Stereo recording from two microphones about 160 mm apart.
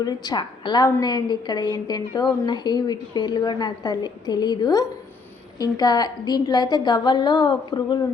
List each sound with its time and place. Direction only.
0.0 s a woman's voice: 25° left (ahead or behind)